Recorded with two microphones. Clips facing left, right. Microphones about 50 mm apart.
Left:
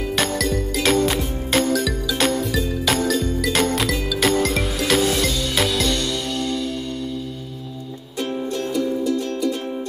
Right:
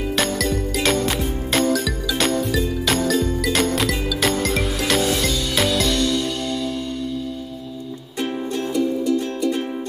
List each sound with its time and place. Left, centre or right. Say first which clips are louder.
0.1 s music: even; centre
8.2 s music: even; right